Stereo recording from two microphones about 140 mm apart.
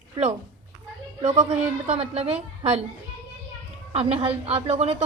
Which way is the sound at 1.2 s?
55° right (ahead or behind).